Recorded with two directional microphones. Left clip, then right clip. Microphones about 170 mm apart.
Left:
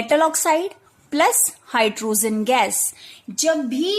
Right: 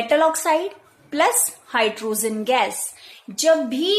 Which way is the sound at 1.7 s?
45° left (ahead or behind).